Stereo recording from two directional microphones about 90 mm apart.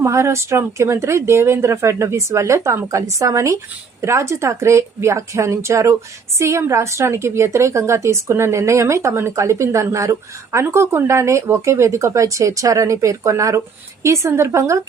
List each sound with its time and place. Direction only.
0.0 s speech: 35° right (ahead or behind)